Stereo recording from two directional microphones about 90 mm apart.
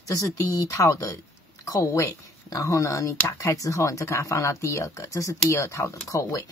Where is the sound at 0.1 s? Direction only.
35° left (ahead or behind).